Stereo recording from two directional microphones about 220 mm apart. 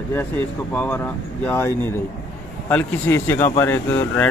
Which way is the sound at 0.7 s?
10° left (ahead or behind).